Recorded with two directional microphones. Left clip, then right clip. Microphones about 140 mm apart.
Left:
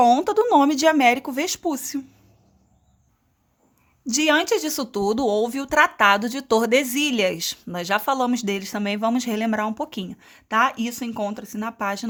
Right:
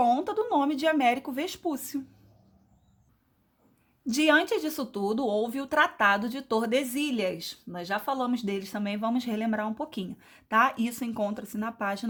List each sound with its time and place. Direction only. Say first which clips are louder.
0.0 s speech: left 8 dB; 30° left (ahead or behind)
4.0 s speech: left 3 dB; 20° left (ahead or behind); by 7.4 s 35° left (ahead or behind)
7.4 s speech: left 9 dB; 50° left (ahead or behind); by 12.0 s 20° left (ahead or behind)